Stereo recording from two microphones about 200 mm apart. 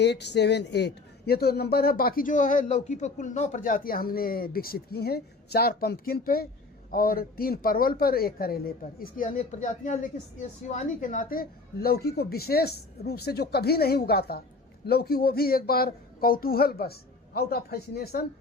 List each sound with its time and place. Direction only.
0.0 s a man's voice: 60° left (ahead or behind)